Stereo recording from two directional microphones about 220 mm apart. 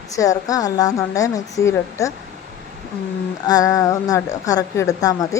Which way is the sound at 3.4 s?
15° left (ahead or behind).